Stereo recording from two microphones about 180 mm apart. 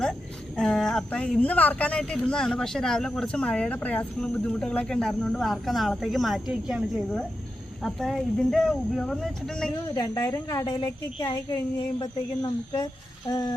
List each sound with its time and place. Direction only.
0.0 s speech: 5° left (ahead or behind)
9.9 s speech: 20° left (ahead or behind)